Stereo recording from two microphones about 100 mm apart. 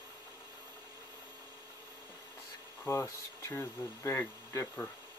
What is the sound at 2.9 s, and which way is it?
Speech, 30° left (ahead or behind).